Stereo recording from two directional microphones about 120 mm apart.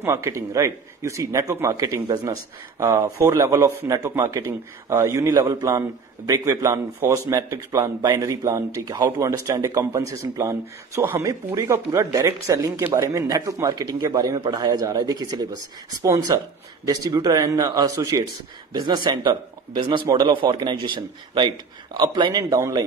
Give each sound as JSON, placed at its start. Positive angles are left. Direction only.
{"t": 0.0, "sound": "speech", "side_deg": -25}
{"t": 5.3, "sound": "a man's voice", "side_deg": -35}